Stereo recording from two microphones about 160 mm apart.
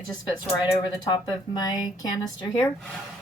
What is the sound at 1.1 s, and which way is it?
Speech, 25° left (ahead or behind).